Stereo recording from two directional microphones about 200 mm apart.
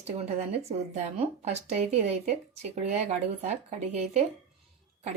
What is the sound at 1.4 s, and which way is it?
A woman's voice, 35° right (ahead or behind).